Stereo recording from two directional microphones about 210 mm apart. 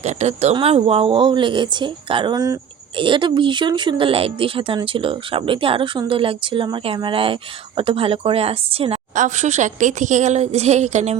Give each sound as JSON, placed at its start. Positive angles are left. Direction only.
{"t": 0.0, "sound": "a woman's voice", "side_deg": -30}